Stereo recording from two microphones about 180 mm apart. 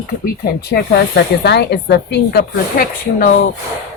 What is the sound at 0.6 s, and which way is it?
Speech, 65° left (ahead or behind).